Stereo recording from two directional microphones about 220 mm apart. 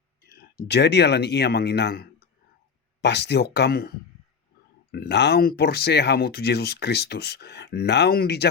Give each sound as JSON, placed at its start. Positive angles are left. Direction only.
{"t": 0.3, "sound": "speech", "side_deg": 45}